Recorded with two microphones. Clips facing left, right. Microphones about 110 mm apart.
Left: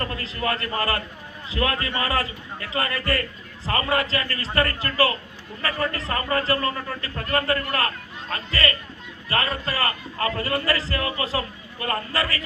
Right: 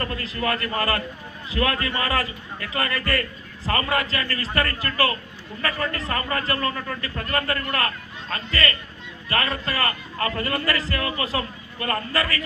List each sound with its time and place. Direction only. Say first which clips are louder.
0.0 s a man's voice: right 1 dB; 30° left (ahead or behind)